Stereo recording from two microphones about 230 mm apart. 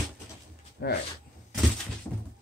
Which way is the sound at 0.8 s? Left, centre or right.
Left.